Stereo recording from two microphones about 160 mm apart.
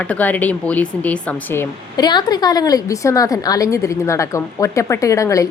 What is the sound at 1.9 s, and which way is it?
A woman's voice, 25° left (ahead or behind).